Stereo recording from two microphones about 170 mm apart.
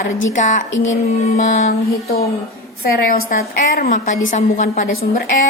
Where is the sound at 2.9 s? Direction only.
55° left (ahead or behind).